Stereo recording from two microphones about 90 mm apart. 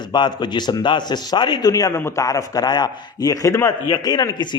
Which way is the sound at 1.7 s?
40° left (ahead or behind).